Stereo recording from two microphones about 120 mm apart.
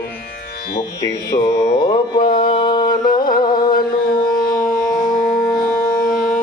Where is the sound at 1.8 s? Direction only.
40° left (ahead or behind).